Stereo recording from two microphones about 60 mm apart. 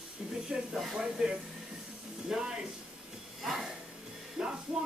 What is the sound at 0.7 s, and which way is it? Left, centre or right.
Speech, centre.